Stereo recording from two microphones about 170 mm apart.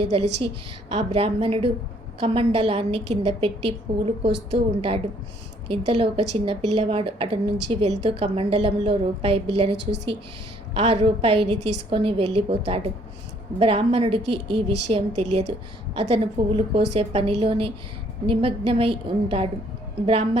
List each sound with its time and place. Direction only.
0.0 s a woman's voice: 35° right (ahead or behind)
10.8 s a woman's voice: 35° right (ahead or behind)